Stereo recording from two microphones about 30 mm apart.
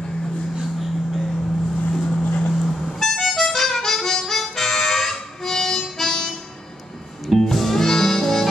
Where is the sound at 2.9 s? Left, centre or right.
Centre.